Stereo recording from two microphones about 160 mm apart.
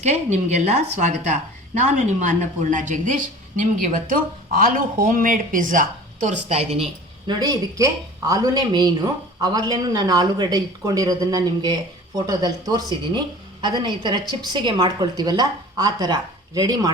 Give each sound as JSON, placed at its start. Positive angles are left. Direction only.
{"t": 0.0, "sound": "a woman's voice", "side_deg": -45}
{"t": 6.2, "sound": "speech", "side_deg": -40}
{"t": 7.3, "sound": "speech", "side_deg": -25}